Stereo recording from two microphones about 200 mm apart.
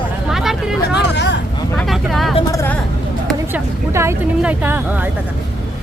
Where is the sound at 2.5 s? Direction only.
15° left (ahead or behind).